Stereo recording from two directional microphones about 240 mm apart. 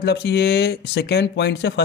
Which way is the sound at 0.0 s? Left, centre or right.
Left.